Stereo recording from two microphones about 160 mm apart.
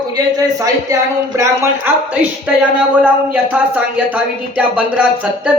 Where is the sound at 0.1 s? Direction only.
20° right (ahead or behind).